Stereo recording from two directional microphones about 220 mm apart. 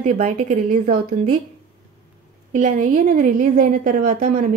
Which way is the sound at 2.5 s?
35° right (ahead or behind).